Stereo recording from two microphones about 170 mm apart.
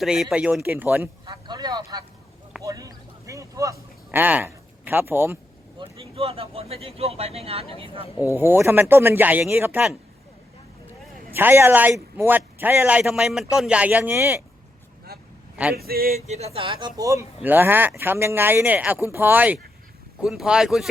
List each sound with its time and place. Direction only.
0.0 s speech: centre (ahead or behind)
1.2 s speech: 25° right (ahead or behind)
5.8 s speech: 35° right (ahead or behind)
8.4 s speech: 10° right (ahead or behind)
11.3 s speech: 15° right (ahead or behind)
15.7 s male singing: 65° right (ahead or behind)
16.2 s speech: 40° right (ahead or behind); by 20.8 s centre (ahead or behind)